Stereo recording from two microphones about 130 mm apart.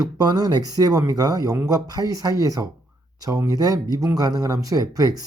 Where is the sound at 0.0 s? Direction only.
30° right (ahead or behind).